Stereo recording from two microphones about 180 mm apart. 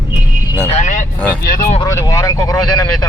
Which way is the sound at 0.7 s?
40° left (ahead or behind).